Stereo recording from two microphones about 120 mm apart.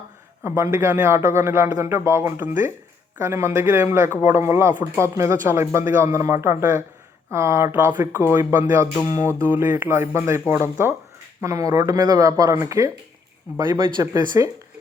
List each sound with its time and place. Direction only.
0.4 s speech: 20° right (ahead or behind)
13.6 s speech: 40° right (ahead or behind)